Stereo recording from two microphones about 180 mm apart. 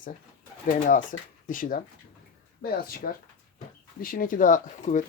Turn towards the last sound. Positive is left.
turn(degrees=45)  # may be behind; listen again after turning